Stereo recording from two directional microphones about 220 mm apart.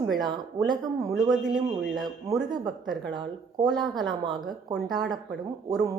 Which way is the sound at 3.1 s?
20° right (ahead or behind).